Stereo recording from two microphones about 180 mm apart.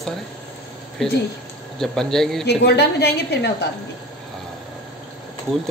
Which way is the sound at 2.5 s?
65° left (ahead or behind).